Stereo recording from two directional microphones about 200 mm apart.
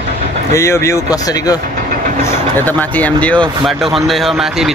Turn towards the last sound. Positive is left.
turn(degrees=0)  # may be behind; listen again after turning